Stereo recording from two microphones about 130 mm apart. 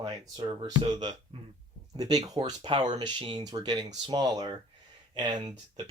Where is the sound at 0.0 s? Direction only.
30° right (ahead or behind).